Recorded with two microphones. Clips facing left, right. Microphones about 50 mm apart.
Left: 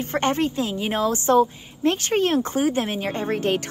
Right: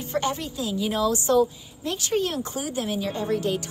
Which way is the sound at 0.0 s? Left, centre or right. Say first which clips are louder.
Left 5 dB; left.